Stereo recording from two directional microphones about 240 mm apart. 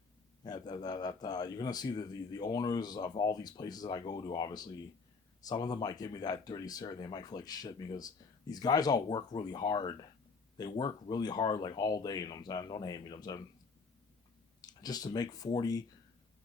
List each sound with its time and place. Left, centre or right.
0.4 s speech: centre
14.7 s speech: centre